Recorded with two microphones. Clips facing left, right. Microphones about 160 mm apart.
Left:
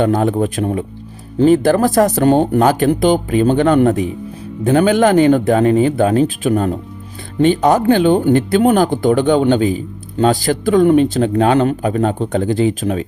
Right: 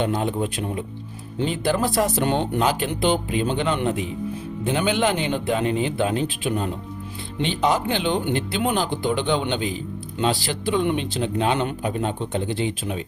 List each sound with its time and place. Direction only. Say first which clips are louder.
0.0 s speech: left 8 dB; 45° left (ahead or behind)